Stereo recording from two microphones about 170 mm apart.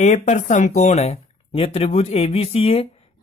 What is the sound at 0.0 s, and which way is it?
Speech, 45° left (ahead or behind).